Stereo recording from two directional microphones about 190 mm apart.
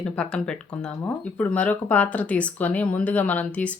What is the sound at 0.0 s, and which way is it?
Speech, 5° left (ahead or behind).